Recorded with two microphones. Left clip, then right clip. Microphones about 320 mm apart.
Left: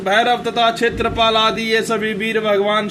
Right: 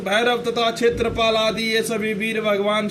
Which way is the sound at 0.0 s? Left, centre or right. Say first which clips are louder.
Left 4 dB; right.